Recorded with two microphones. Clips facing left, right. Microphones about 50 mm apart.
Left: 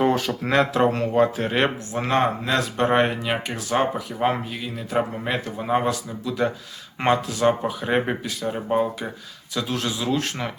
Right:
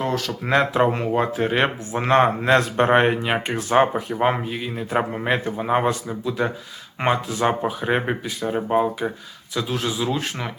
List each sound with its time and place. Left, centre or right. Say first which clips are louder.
0.0 s a sound: left 4 dB; centre
0.4 s speech: right 1 dB; centre
1.9 s speech: right 4 dB; right
4.7 s speech: even; right
6.2 s speech: even; centre